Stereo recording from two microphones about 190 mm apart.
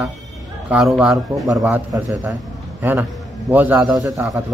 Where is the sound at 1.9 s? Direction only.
15° right (ahead or behind).